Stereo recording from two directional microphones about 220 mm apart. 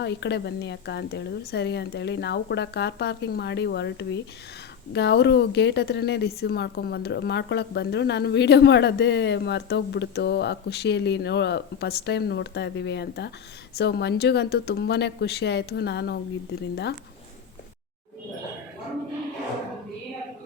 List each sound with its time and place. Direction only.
0.0 s a woman's voice: 50° left (ahead or behind)